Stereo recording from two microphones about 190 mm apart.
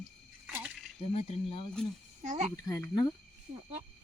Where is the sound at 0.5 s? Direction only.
5° right (ahead or behind).